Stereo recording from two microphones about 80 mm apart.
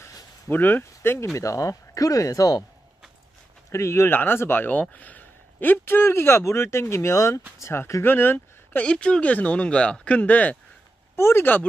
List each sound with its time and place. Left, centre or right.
0.5 s speech: left
3.7 s speech: left
8.8 s speech: centre
11.1 s speech: left